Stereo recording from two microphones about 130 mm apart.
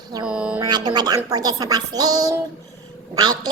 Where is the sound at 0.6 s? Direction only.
35° right (ahead or behind).